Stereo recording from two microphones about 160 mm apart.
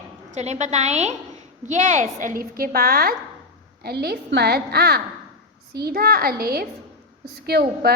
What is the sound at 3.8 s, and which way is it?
A woman's voice, 85° right.